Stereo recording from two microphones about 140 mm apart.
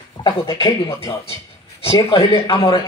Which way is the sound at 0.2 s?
40° left (ahead or behind).